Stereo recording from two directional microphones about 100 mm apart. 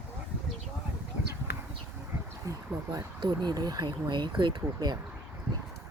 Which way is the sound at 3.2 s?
45° right (ahead or behind).